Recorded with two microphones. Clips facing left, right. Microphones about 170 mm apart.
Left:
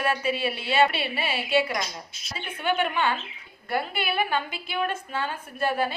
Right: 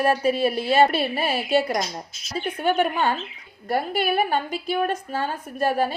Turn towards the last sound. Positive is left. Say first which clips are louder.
# right 4 dB
turn(degrees=-40)  # may be behind; listen again after turning